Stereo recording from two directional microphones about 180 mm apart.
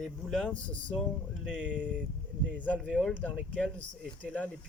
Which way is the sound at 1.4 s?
5° right (ahead or behind).